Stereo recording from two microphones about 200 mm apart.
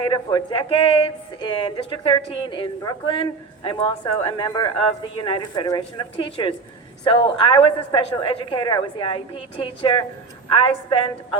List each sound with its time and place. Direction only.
0.1 s a woman's voice: 25° left (ahead or behind)